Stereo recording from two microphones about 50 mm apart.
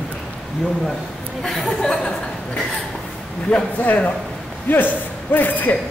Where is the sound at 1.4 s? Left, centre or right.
Centre.